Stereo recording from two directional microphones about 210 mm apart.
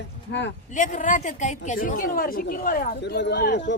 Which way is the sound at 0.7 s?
35° left (ahead or behind).